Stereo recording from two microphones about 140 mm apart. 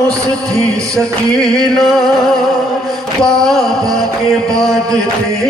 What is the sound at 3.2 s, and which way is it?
Music, 5° left (ahead or behind).